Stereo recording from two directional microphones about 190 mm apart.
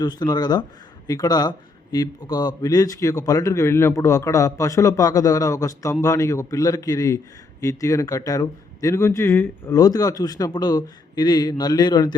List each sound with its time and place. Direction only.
0.0 s a man's voice: 20° left (ahead or behind)